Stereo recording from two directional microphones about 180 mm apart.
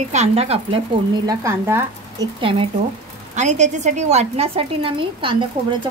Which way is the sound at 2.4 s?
30° right (ahead or behind).